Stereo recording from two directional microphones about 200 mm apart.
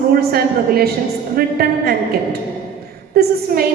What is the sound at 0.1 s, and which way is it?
A woman's voice, 50° right (ahead or behind).